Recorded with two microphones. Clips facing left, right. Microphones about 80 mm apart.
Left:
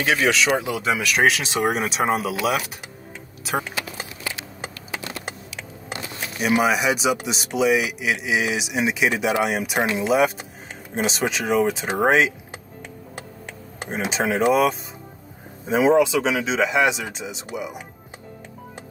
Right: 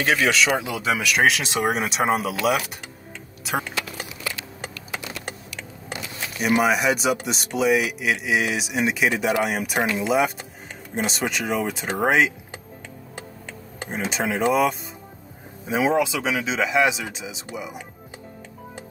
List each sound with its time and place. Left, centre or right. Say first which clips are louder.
0.0 s speech: even; centre
3.4 s typing: left 1 dB; centre
6.4 s speech: even; centre
13.8 s speech: left 2 dB; centre